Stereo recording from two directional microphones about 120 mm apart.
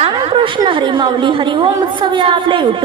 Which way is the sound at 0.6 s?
40° right (ahead or behind).